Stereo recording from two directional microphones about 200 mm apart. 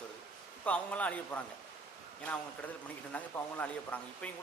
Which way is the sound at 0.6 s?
5° left (ahead or behind).